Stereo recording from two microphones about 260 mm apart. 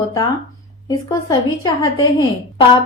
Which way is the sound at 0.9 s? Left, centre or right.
Centre.